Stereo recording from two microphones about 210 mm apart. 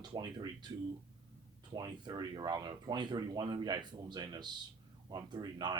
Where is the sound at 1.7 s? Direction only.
20° right (ahead or behind).